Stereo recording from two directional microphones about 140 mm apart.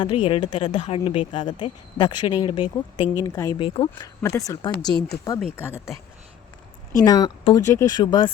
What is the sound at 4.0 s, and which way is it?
Speech, 25° left (ahead or behind).